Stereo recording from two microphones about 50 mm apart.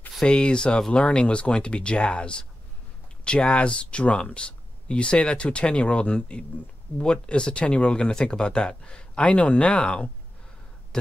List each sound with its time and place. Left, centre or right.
0.2 s speech: centre